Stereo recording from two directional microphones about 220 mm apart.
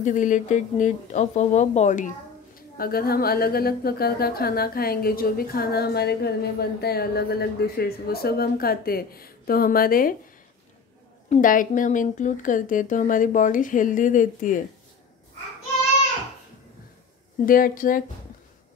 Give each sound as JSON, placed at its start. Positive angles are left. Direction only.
{"t": 0.0, "sound": "a woman's voice", "side_deg": 35}
{"t": 11.2, "sound": "speech", "side_deg": 35}
{"t": 17.5, "sound": "speech", "side_deg": 40}